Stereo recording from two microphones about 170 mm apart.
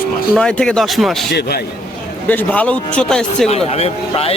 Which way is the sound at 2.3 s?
10° left (ahead or behind).